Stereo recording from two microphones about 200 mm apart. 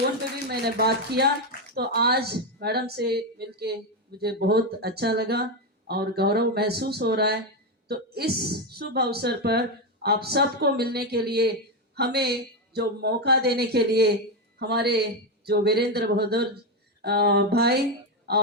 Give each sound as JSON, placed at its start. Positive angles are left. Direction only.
{"t": 0.4, "sound": "a woman's voice", "side_deg": -55}